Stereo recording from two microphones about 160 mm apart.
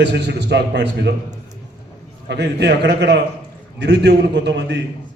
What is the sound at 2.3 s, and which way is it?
A man's voice, 90° right.